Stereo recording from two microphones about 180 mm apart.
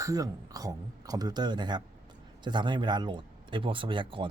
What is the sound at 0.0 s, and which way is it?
A man's voice, 20° right (ahead or behind).